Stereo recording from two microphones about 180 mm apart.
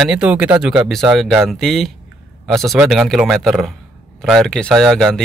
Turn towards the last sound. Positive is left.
turn(degrees=0)  # may be behind; listen again after turning